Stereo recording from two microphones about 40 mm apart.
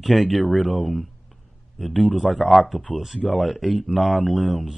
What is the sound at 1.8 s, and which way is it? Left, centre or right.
Speech, centre.